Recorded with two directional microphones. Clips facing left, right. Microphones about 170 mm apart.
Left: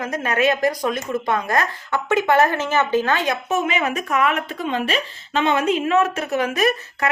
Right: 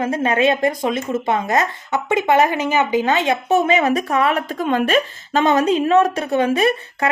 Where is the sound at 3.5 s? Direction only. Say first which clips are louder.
Right 8 dB; 35° right (ahead or behind).